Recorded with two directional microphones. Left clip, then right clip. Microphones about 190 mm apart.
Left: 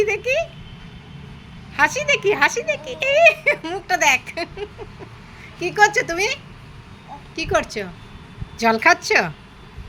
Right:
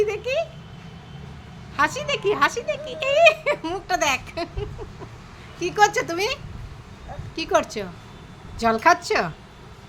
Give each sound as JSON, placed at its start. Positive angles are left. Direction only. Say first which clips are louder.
{"t": 0.0, "sound": "speech", "louder": "left 3 dB", "side_deg": -5}
{"t": 1.7, "sound": "a child's voice", "louder": "left 5 dB", "side_deg": -5}
{"t": 8.5, "sound": "a woman's voice", "louder": "left 2 dB", "side_deg": 0}